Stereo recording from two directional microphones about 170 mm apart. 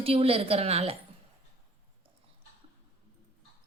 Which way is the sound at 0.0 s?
35° right (ahead or behind).